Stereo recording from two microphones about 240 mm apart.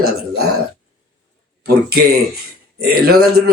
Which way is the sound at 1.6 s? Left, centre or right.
Right.